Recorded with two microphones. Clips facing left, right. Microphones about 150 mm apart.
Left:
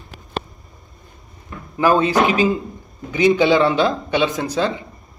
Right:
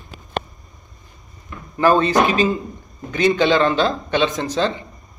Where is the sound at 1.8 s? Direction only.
10° left (ahead or behind).